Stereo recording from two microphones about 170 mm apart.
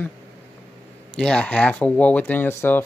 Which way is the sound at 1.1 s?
5° left (ahead or behind).